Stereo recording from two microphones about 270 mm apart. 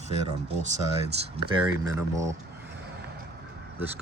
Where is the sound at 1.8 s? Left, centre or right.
Centre.